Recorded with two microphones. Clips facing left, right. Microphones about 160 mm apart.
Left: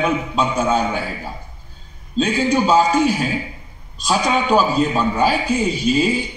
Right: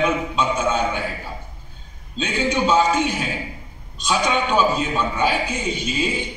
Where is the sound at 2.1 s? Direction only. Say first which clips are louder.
Left 5 dB; 40° left (ahead or behind).